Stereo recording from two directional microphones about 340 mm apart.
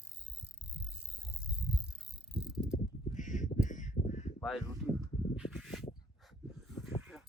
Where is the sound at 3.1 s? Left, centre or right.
Left.